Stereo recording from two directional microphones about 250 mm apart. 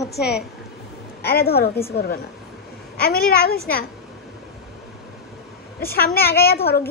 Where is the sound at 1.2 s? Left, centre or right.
Left.